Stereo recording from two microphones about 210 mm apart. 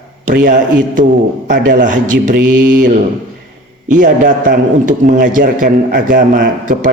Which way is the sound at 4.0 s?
40° right (ahead or behind).